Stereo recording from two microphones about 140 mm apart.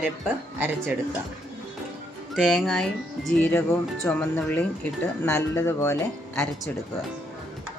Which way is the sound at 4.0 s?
10° left (ahead or behind).